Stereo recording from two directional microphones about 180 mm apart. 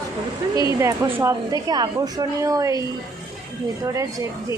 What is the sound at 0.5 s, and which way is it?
A woman's voice, 20° right (ahead or behind).